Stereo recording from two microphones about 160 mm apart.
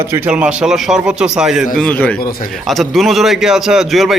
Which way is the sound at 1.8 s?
10° left (ahead or behind).